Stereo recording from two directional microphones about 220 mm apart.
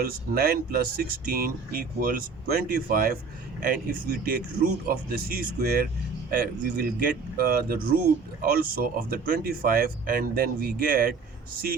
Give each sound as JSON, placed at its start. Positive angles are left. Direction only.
{"t": 0.0, "sound": "speech", "side_deg": -40}